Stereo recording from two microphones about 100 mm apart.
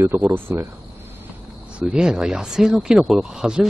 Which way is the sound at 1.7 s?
10° right (ahead or behind).